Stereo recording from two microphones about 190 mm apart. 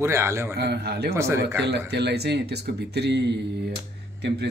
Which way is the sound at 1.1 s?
15° right (ahead or behind).